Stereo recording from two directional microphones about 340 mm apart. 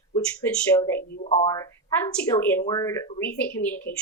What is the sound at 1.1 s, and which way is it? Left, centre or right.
Speech, centre.